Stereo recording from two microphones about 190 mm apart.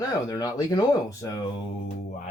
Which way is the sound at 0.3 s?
20° left (ahead or behind).